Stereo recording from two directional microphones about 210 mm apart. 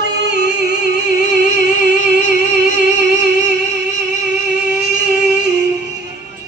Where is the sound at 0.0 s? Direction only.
55° right (ahead or behind).